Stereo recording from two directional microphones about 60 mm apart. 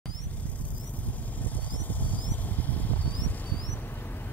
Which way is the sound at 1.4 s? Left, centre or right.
Left.